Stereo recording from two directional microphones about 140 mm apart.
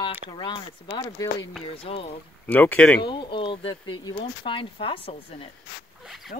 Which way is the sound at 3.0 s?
35° left (ahead or behind).